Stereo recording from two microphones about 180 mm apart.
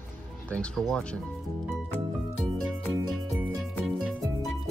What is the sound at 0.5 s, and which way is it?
Speech, 5° left (ahead or behind).